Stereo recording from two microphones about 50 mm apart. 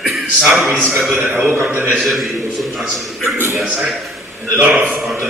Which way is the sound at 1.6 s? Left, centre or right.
Right.